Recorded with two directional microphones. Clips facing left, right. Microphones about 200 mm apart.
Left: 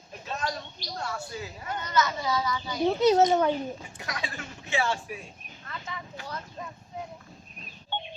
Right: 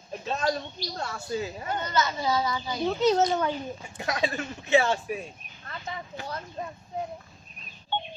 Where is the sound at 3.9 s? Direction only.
25° right (ahead or behind).